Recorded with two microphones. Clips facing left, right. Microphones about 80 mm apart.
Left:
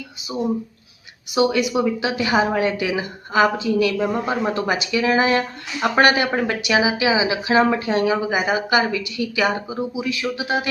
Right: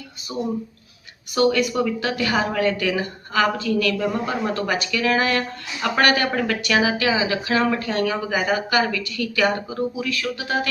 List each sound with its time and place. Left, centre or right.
1.4 s a woman's voice: centre